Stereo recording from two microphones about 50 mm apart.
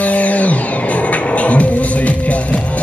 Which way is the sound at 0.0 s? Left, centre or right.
Left.